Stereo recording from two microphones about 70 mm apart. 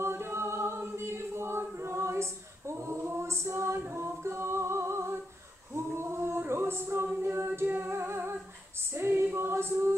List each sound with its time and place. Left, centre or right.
0.0 s choir: right
3.8 s music: right
5.8 s singing: right
7.2 s music: right
8.9 s female singing: right
9.3 s choir: right